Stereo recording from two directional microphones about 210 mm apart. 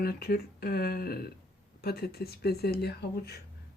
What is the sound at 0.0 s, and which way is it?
Speech, 45° left (ahead or behind).